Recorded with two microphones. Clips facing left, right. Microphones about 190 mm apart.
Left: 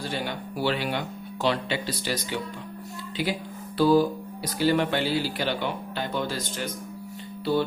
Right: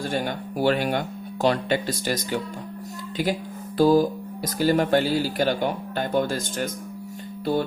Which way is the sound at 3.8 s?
45° right (ahead or behind).